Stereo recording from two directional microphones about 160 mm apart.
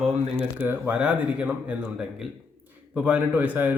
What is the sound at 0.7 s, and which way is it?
Speech, 10° right (ahead or behind).